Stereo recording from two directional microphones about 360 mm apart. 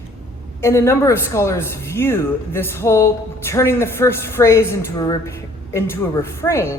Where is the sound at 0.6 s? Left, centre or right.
Centre.